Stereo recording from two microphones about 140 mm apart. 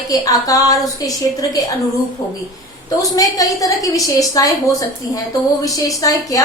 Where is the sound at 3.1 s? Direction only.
25° left (ahead or behind).